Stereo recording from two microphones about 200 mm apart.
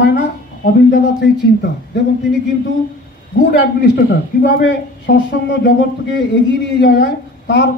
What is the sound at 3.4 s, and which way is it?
A man's voice, 55° left (ahead or behind).